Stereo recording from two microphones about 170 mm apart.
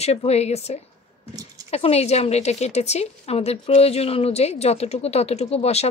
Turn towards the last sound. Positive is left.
turn(degrees=40)  # may be behind; listen again after turning